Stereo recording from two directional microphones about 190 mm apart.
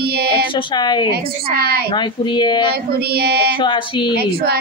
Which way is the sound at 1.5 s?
55° right (ahead or behind).